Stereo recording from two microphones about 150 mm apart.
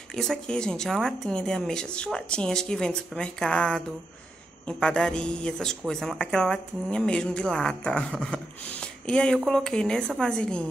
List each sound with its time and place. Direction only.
0.1 s speech: 5° left (ahead or behind)